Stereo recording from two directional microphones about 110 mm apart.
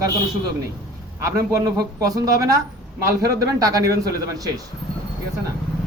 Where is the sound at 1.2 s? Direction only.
30° right (ahead or behind).